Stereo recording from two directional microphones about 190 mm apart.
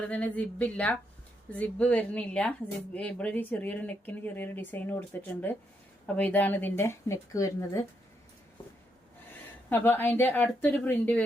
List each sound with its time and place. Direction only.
0.1 s a woman's voice: 10° left (ahead or behind)
9.6 s a woman's voice: 10° left (ahead or behind)